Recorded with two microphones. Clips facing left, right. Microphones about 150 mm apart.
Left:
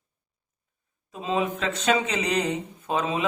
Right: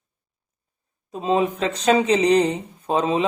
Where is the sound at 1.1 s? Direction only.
35° right (ahead or behind).